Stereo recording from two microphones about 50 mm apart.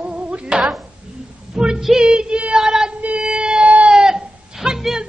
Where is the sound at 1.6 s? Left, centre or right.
Centre.